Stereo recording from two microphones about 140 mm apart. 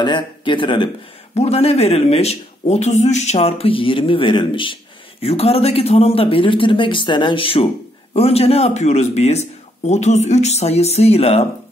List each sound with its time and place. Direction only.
0.0 s speech: 35° left (ahead or behind)
1.3 s speech: 45° left (ahead or behind)